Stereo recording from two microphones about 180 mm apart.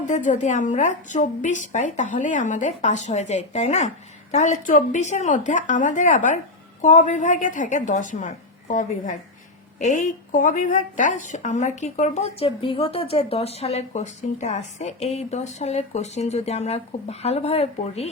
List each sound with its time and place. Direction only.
0.0 s a woman's voice: 45° left (ahead or behind)